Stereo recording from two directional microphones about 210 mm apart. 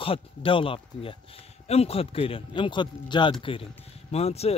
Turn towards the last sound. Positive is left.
turn(degrees=30)  # may be behind; listen again after turning